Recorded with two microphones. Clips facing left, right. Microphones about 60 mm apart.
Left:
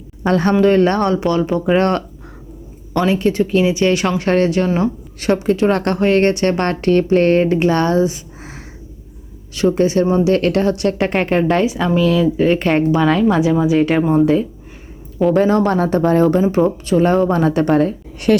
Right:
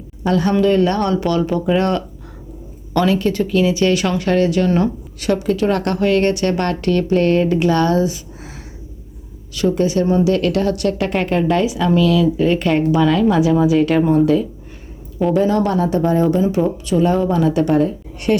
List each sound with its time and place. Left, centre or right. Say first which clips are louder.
0.2 s speech: left 2 dB; left
1.8 s speech: left 2 dB; left
3.1 s speech: left 2 dB; left
4.2 s a woman's voice: left 1 dB; left
15.3 s a woman's voice: left 2 dB; left
18.3 s speech: left 3 dB; left